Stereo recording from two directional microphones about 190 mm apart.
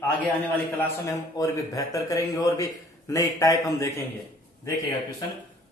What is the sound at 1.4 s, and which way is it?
Speech, 20° left (ahead or behind).